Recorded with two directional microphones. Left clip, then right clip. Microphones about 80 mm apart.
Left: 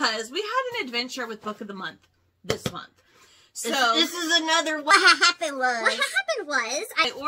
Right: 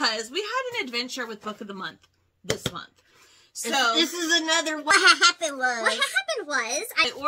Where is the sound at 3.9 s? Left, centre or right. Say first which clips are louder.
Even; left.